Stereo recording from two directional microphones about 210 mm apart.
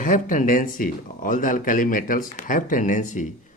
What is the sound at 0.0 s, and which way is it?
Speech, 40° left (ahead or behind).